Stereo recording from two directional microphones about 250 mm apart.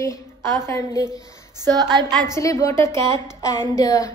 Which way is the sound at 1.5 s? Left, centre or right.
Centre.